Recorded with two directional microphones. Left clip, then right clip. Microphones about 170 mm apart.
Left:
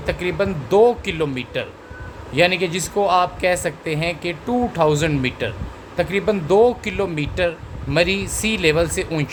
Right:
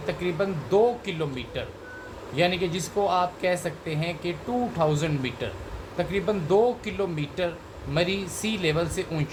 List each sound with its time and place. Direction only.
0.0 s speech: 90° left